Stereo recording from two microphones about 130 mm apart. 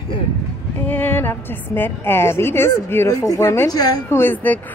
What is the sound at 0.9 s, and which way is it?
A woman's voice, 15° left (ahead or behind).